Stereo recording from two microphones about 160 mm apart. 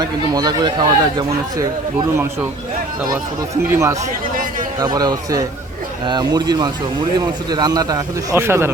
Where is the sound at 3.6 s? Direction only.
15° right (ahead or behind).